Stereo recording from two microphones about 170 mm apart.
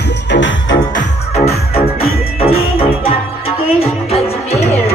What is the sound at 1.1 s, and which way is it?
Music, 40° left (ahead or behind).